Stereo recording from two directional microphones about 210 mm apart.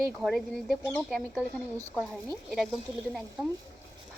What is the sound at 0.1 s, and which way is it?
Speech, centre (ahead or behind).